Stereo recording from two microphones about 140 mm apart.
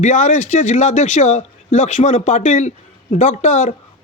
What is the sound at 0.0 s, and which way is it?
Speech, 60° left (ahead or behind).